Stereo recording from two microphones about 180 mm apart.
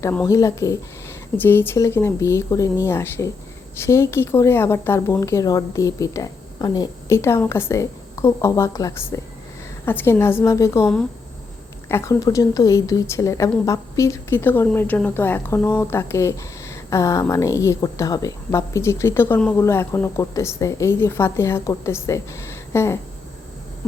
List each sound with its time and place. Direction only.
0.0 s a woman's voice: 10° left (ahead or behind)
11.9 s a woman's voice: 15° left (ahead or behind)